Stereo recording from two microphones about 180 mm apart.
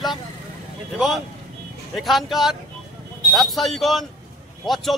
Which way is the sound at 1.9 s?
Centre (ahead or behind).